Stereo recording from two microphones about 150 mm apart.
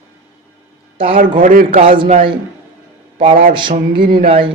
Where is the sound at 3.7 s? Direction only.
80° right.